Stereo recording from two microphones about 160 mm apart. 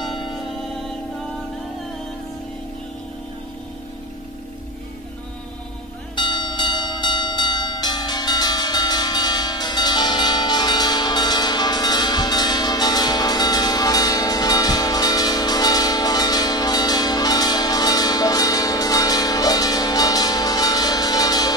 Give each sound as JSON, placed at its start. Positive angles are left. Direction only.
{"t": 6.1, "sound": "church bell", "side_deg": 30}